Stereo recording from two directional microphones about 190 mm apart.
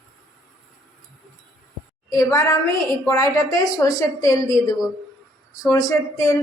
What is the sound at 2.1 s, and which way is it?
A woman's voice, 15° left (ahead or behind).